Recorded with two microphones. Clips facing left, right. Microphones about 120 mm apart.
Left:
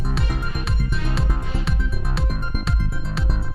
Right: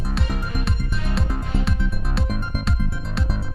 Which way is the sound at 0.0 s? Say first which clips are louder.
Even; centre (ahead or behind).